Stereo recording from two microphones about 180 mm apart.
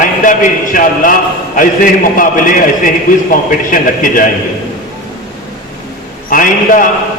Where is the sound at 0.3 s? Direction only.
50° left (ahead or behind).